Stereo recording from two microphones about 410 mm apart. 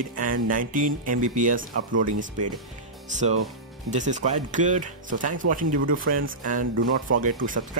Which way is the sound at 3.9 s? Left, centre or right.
Centre.